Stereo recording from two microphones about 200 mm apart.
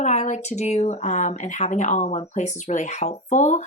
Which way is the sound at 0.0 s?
35° left (ahead or behind).